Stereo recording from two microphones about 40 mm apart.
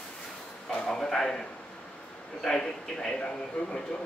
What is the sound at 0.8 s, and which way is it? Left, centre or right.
A man's voice, centre.